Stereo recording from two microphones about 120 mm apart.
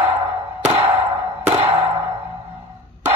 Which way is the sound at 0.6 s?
60° right (ahead or behind).